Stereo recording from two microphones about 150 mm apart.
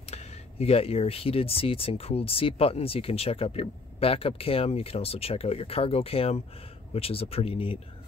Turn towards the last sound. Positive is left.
turn(degrees=40)  # may be behind; listen again after turning